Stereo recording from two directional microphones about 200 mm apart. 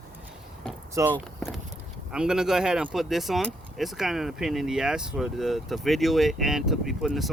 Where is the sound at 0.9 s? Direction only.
15° right (ahead or behind).